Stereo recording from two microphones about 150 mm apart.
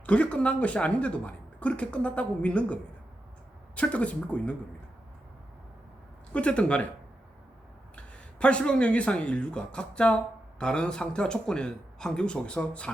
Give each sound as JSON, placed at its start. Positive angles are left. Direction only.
{"t": 0.0, "sound": "speech", "side_deg": 10}
{"t": 3.8, "sound": "speech", "side_deg": 10}
{"t": 6.3, "sound": "speech", "side_deg": 10}
{"t": 7.9, "sound": "a man's voice", "side_deg": 10}